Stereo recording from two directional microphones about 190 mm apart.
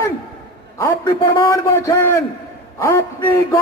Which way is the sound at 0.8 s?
15° left (ahead or behind).